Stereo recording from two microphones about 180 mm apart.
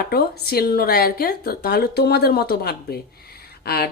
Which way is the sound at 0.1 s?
55° left (ahead or behind).